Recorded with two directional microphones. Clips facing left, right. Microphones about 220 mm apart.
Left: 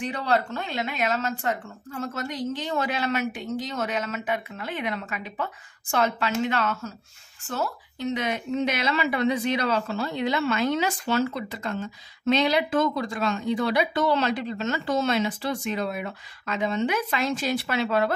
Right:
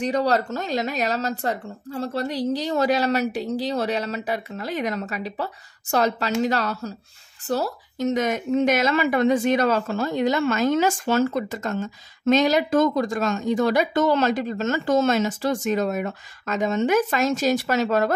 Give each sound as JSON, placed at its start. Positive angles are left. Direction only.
{"t": 0.0, "sound": "a woman's voice", "side_deg": -40}